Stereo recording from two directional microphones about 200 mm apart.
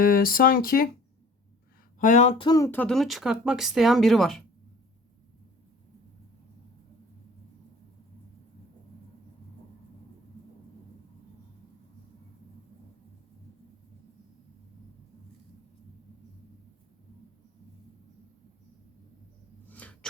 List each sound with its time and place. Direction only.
0.0 s speech: 45° left (ahead or behind)
2.0 s speech: 35° left (ahead or behind)
2.5 s speech: 15° left (ahead or behind)
19.6 s a sound: 5° left (ahead or behind)